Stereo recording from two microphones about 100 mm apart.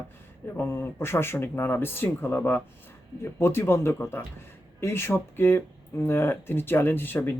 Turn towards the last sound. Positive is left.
turn(degrees=20)  # may be behind; listen again after turning